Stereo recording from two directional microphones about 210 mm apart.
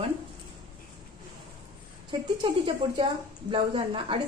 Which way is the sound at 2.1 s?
25° right (ahead or behind).